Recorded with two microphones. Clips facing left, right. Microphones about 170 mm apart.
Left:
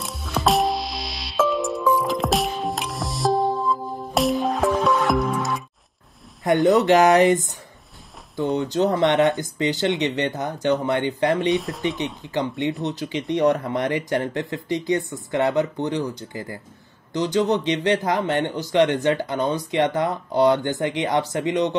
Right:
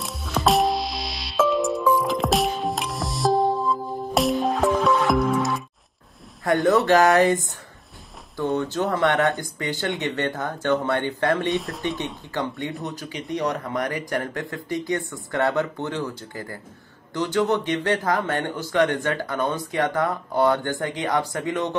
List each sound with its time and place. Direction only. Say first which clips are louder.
0.0 s music: even; centre (ahead or behind)
6.4 s speech: left 2 dB; 20° left (ahead or behind)
11.5 s speech: left 3 dB; centre (ahead or behind)
12.0 s speech: left 3 dB; 20° left (ahead or behind)